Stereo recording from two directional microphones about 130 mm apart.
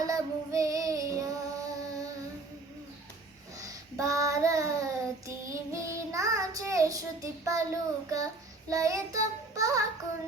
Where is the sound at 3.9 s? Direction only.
25° right (ahead or behind).